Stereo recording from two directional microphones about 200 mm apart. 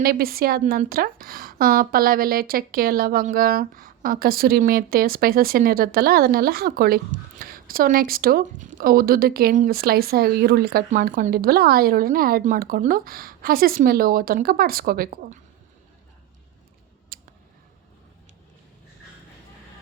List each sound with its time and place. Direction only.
0.0 s a woman's voice: 50° right (ahead or behind)
17.1 s scissors: 45° right (ahead or behind)